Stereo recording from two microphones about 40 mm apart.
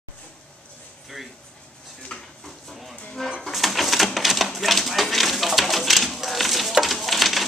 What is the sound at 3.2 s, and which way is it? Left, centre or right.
Music, centre.